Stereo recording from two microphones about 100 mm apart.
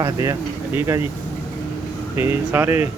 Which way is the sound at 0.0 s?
30° right (ahead or behind).